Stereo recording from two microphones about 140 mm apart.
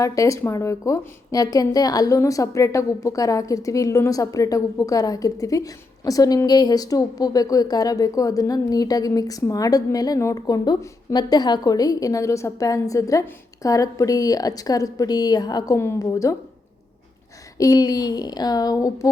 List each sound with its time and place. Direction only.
0.0 s a woman's voice: 25° left (ahead or behind)
17.6 s a woman's voice: 25° left (ahead or behind)